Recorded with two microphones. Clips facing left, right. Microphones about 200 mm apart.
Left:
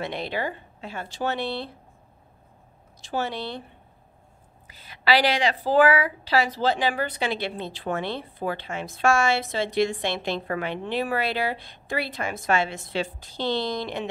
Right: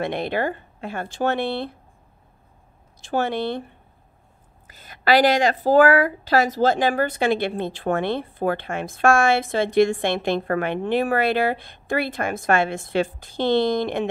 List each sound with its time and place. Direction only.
0.0 s a woman's voice: 55° right (ahead or behind)
3.0 s a woman's voice: 55° right (ahead or behind)
4.6 s a woman's voice: 50° right (ahead or behind)